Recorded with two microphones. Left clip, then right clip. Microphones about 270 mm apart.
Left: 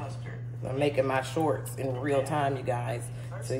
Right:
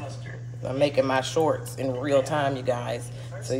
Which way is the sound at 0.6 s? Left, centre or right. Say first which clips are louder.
Right 4 dB; right.